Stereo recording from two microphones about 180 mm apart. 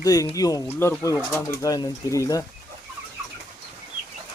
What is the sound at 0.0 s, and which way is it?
Speech, 20° left (ahead or behind).